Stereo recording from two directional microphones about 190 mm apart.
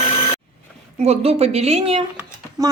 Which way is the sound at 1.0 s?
35° right (ahead or behind).